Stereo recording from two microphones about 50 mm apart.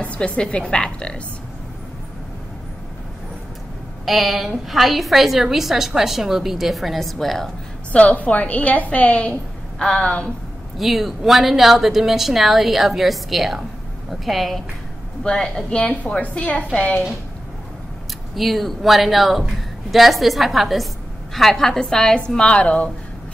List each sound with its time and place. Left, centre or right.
0.0 s a woman's voice: left
4.0 s a woman's voice: centre
7.9 s a woman's voice: left
9.8 s a woman's voice: centre
10.8 s a woman's voice: centre
15.2 s speech: centre
15.8 s a woman's voice: left
18.3 s a woman's voice: centre; by 22.8 s left